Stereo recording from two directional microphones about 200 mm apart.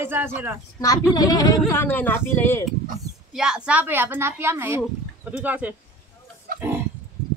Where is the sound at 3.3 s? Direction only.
5° right (ahead or behind).